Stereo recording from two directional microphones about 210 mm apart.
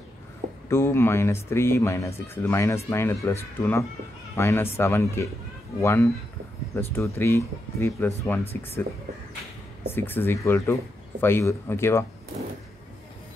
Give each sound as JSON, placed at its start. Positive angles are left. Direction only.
{"t": 0.7, "sound": "speech", "side_deg": 10}